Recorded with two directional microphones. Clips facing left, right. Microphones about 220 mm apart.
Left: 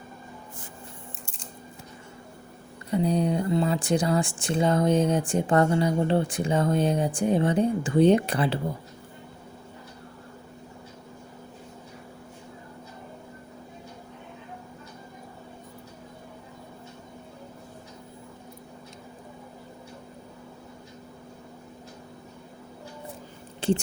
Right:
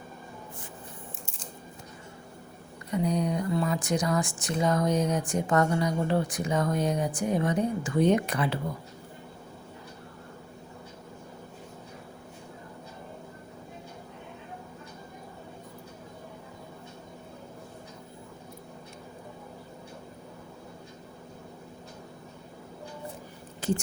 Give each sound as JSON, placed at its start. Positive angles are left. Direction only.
{"t": 2.9, "sound": "speech", "side_deg": 30}
{"t": 23.6, "sound": "whispering", "side_deg": 30}